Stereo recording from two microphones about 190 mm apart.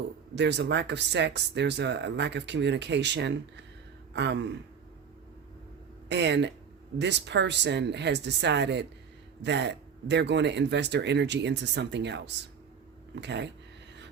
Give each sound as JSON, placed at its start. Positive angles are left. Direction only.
{"t": 0.3, "sound": "speech", "side_deg": -65}
{"t": 6.1, "sound": "speech", "side_deg": -65}